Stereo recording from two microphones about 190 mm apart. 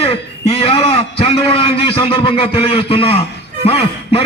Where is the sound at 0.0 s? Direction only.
30° left (ahead or behind).